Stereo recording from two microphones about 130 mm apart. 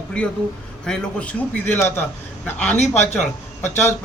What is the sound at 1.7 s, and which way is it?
Speech, 20° left (ahead or behind).